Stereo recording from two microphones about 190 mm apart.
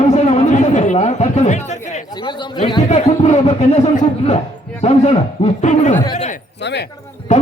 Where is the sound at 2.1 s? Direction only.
25° left (ahead or behind).